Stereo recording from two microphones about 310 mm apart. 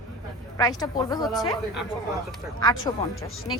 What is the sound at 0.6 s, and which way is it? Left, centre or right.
Speech, centre.